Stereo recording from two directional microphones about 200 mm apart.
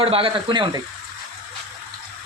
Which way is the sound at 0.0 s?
30° right (ahead or behind).